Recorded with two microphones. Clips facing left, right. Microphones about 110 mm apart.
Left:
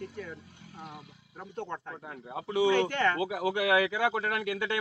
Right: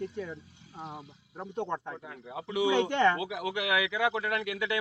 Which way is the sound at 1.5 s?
20° right (ahead or behind).